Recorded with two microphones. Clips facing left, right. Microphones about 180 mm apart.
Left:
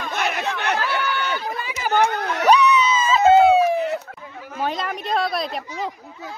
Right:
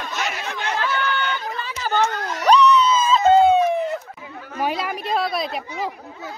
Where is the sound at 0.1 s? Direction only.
60° left (ahead or behind).